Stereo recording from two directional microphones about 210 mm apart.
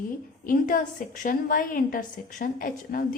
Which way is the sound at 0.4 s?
40° left (ahead or behind).